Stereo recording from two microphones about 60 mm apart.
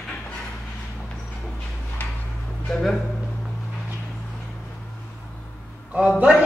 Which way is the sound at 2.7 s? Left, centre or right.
Centre.